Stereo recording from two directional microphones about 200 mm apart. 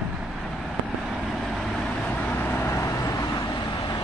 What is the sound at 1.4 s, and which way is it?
Vehicle, centre (ahead or behind).